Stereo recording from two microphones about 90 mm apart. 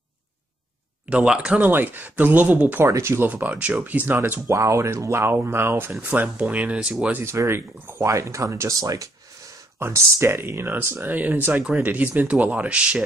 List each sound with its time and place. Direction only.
1.1 s speech: 10° right (ahead or behind)
2.8 s speech: 30° right (ahead or behind); by 7.2 s 15° right (ahead or behind)
7.2 s speech: 30° right (ahead or behind); by 13.0 s 15° right (ahead or behind)